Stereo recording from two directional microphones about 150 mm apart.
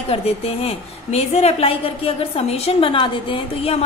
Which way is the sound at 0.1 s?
40° left (ahead or behind).